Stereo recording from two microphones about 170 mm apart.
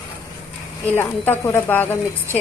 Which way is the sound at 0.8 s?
10° left (ahead or behind).